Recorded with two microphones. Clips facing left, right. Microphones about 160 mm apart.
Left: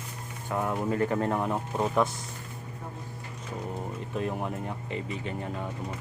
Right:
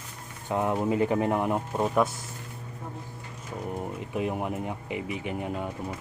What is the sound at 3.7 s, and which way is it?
Speech, 15° right (ahead or behind).